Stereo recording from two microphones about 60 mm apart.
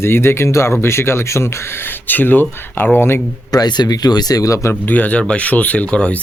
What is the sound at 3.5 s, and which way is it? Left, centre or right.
Speech, left.